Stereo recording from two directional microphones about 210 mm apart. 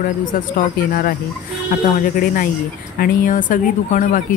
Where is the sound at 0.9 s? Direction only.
40° left (ahead or behind).